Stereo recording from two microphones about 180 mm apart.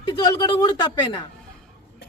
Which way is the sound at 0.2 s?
25° left (ahead or behind).